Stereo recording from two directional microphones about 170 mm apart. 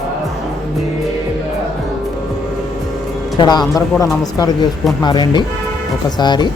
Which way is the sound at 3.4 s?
25° left (ahead or behind).